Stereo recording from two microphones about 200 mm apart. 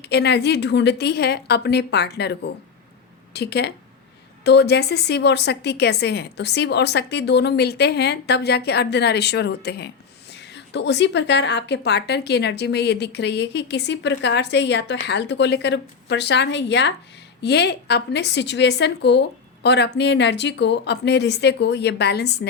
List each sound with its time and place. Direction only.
0.0 s a woman's voice: 55° left (ahead or behind)